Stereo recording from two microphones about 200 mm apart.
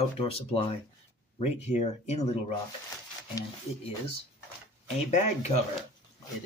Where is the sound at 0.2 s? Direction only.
30° left (ahead or behind).